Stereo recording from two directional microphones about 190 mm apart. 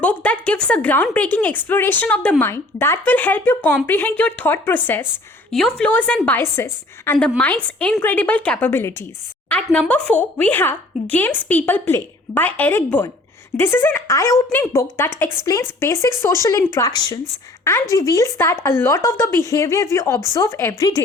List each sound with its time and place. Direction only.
0.0 s a woman's voice: 10° left (ahead or behind)